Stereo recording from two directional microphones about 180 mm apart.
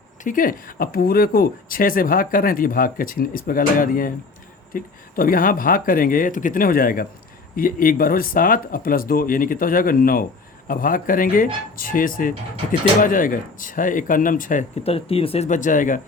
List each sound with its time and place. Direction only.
0.3 s speech: 50° left (ahead or behind)
14.8 s speech: 30° left (ahead or behind)